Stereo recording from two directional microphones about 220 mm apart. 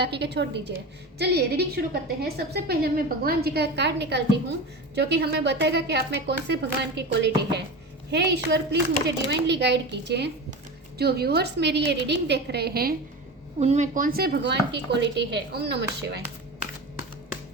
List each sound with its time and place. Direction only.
0.0 s a woman's voice: 50° right (ahead or behind)
13.6 s a woman's voice: 30° right (ahead or behind); by 16.2 s 50° right (ahead or behind)